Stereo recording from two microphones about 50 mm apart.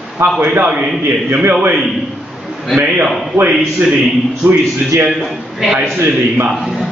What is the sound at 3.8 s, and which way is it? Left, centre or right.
Speech, right.